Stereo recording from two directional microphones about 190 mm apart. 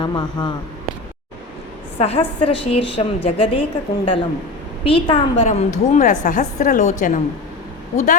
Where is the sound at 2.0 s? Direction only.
30° left (ahead or behind).